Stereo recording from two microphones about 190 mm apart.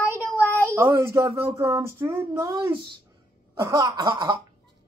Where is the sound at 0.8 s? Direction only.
15° right (ahead or behind).